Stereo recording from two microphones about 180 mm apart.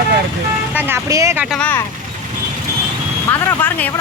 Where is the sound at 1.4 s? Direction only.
5° left (ahead or behind).